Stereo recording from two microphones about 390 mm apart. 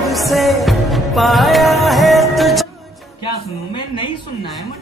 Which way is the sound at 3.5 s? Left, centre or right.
Centre.